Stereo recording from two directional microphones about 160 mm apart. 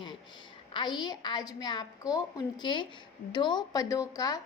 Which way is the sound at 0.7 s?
30° left (ahead or behind).